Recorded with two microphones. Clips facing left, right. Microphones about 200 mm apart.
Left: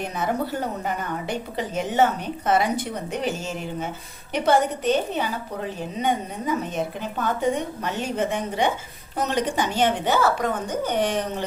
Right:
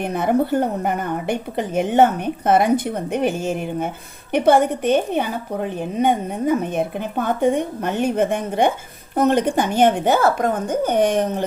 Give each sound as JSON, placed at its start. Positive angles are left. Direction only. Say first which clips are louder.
{"t": 0.0, "sound": "a woman's voice", "louder": "right 7 dB", "side_deg": -55}